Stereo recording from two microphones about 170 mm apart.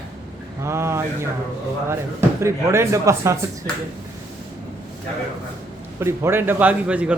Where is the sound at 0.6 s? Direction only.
15° right (ahead or behind).